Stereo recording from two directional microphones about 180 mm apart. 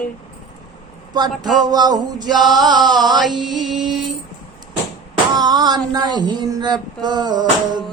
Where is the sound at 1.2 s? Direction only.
25° right (ahead or behind).